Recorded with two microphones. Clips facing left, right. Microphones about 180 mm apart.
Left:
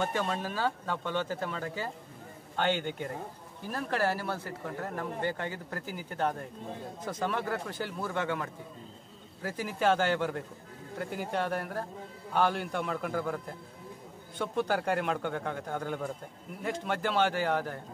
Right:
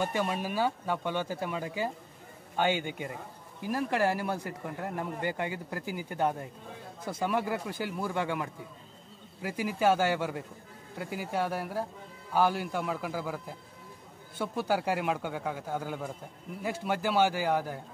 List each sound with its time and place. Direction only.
0.0 s speech: 10° right (ahead or behind)